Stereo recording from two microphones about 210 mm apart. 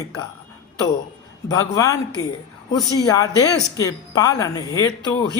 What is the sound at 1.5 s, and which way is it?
Speech, 15° left (ahead or behind).